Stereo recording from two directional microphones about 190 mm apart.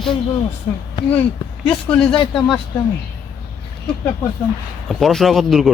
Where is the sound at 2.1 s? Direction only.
25° left (ahead or behind).